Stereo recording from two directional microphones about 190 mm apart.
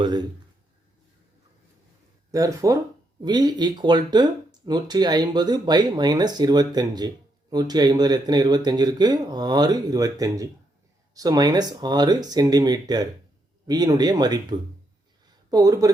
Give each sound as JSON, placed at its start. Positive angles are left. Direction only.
{"t": 0.0, "sound": "speech", "side_deg": -20}
{"t": 2.3, "sound": "speech", "side_deg": -15}
{"t": 15.4, "sound": "speech", "side_deg": -20}